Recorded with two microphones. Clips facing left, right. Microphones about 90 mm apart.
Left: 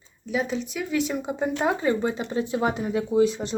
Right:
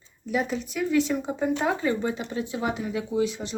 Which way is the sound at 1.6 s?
20° left (ahead or behind).